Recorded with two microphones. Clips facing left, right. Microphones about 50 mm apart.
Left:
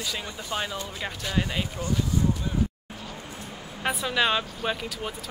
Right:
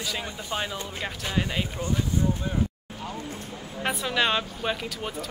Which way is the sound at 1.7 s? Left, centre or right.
Right.